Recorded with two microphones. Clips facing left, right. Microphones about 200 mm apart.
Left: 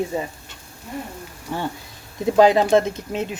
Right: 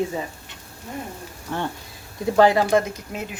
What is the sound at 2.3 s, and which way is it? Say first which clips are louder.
Speech: left 2 dB; 20° left (ahead or behind).